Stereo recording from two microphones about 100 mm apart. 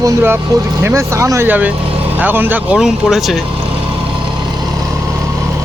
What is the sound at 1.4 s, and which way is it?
Speech, 15° right (ahead or behind).